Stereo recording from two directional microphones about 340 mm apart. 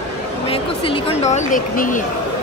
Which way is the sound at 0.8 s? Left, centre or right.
Centre.